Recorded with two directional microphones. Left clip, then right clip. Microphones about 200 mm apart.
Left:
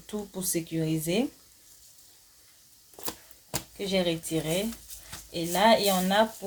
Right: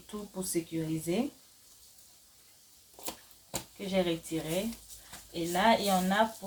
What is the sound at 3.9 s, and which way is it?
Speech, 45° left (ahead or behind).